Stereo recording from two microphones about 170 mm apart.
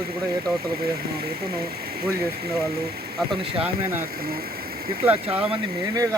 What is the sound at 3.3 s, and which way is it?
Speech, 30° right (ahead or behind).